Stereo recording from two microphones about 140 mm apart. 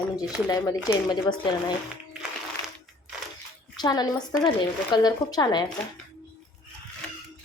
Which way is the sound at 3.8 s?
30° left (ahead or behind).